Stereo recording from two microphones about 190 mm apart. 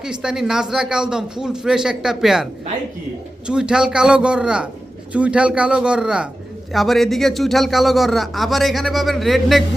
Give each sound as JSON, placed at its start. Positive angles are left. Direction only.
{"t": 0.0, "sound": "speech", "side_deg": -5}